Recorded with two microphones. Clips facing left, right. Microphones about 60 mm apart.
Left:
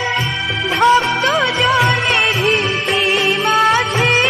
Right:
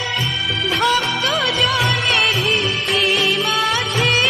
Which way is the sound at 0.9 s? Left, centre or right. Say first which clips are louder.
Left 8 dB; left.